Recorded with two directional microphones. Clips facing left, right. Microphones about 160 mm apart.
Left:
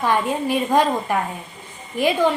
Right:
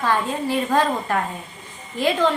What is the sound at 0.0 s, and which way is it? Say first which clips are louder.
A woman's voice: left 2 dB; 15° left (ahead or behind).